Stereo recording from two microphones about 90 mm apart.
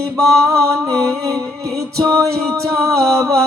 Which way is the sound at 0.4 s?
35° right (ahead or behind).